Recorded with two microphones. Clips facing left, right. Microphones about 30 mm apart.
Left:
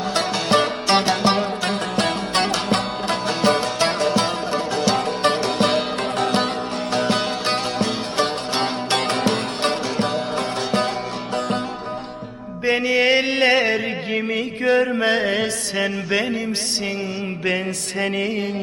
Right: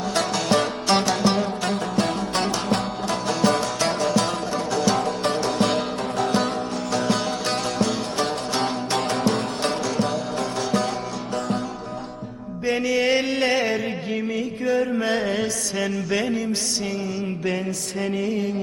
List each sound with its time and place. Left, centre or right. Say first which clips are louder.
0.1 s music: left 2 dB; left
1.7 s music: left 2 dB; left
3.2 s music: left 2 dB; left
4.9 s music: left 3 dB; left
6.9 s music: left 3 dB; left
7.4 s music: left 2 dB; left
8.9 s music: left 3 dB; left
12.6 s music: left 3 dB; left
14.3 s music: left 5 dB; left
14.8 s mantra: left 3 dB; left
18.0 s music: left 2 dB; left